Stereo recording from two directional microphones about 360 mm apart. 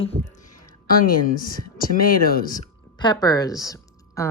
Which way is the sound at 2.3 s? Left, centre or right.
Left.